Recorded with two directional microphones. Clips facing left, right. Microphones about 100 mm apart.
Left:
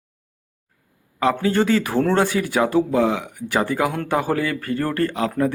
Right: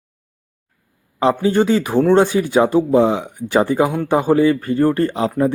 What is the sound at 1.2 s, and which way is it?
Speech, 20° right (ahead or behind).